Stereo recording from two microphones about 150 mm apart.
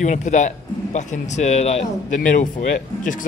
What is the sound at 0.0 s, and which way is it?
Speech, 55° left (ahead or behind).